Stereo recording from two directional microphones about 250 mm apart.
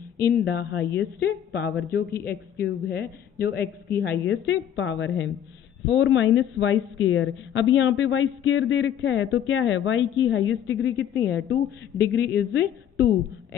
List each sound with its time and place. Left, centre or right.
0.3 s speech: left